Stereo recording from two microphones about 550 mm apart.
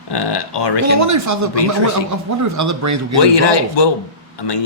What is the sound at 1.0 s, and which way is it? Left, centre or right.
Speech, right.